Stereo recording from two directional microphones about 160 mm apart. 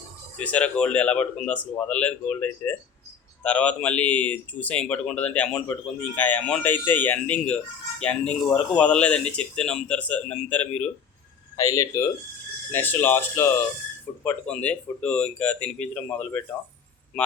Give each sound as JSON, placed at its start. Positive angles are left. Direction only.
{"t": 0.3, "sound": "speech", "side_deg": 10}
{"t": 11.5, "sound": "speech", "side_deg": 20}